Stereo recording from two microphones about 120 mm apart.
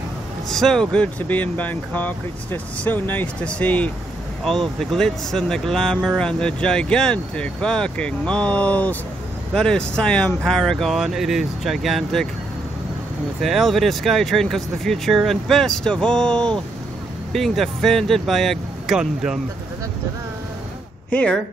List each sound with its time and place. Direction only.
0.5 s speech: 5° left (ahead or behind)
13.4 s speech: centre (ahead or behind)
21.1 s speech: 10° left (ahead or behind)